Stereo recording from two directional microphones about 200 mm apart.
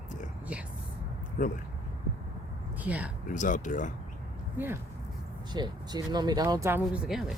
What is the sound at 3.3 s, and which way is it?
Speech, 40° left (ahead or behind).